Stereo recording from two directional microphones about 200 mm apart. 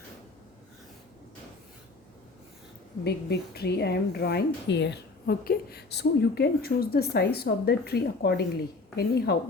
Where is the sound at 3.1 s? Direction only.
55° left (ahead or behind).